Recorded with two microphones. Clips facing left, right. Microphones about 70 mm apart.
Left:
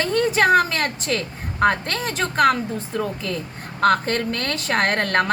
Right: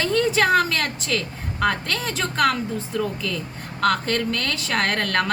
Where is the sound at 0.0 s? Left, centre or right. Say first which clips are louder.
Left 1 dB; left.